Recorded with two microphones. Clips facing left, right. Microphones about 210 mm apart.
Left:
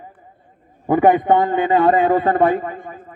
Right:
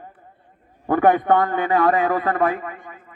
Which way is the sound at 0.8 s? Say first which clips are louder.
Left 3 dB; 15° left (ahead or behind).